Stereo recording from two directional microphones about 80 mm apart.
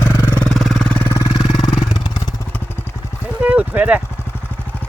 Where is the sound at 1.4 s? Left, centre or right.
Left.